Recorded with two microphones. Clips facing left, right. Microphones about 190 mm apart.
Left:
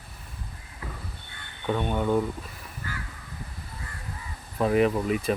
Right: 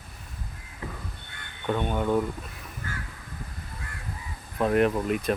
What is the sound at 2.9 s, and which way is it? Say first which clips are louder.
Crow: even; 50° right (ahead or behind).